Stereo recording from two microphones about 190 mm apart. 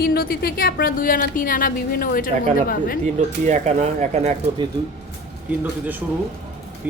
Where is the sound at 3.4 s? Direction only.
35° right (ahead or behind).